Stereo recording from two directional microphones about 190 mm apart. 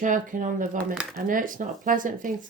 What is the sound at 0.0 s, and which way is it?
Speech, 45° right (ahead or behind).